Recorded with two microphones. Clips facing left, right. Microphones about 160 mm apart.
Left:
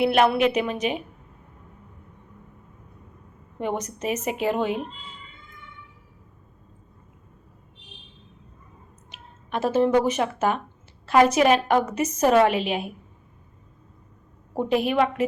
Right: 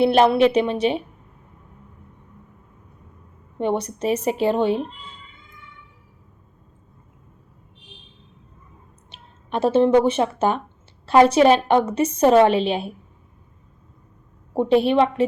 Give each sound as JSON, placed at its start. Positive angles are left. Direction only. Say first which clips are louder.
{"t": 0.0, "sound": "a woman's voice", "louder": "right 4 dB", "side_deg": -30}
{"t": 3.6, "sound": "a woman's voice", "louder": "right 5 dB", "side_deg": -30}
{"t": 9.0, "sound": "a woman's voice", "louder": "right 3 dB", "side_deg": -30}
{"t": 14.5, "sound": "a woman's voice", "louder": "right 5 dB", "side_deg": -30}